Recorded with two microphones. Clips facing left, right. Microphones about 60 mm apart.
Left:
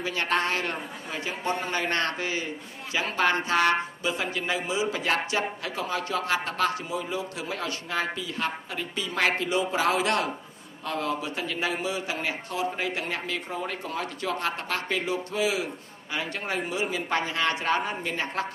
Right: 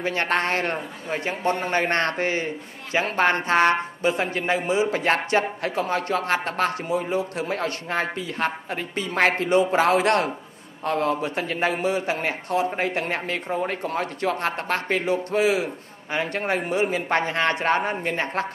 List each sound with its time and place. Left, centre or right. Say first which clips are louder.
0.0 s a man's voice: right 3 dB; right